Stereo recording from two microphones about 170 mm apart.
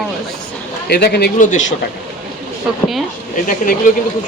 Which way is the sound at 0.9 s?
70° left (ahead or behind).